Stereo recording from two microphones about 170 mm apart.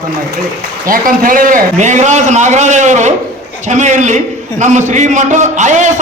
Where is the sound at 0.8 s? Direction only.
55° right (ahead or behind).